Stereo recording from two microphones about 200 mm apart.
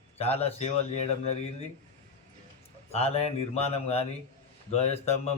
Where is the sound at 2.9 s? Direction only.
30° left (ahead or behind).